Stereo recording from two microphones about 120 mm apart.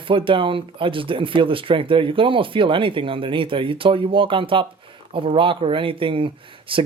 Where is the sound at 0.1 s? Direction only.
45° right (ahead or behind).